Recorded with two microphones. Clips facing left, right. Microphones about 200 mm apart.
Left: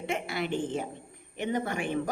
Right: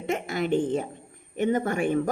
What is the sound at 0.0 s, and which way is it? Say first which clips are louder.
A woman's voice: right 4 dB; 45° right (ahead or behind).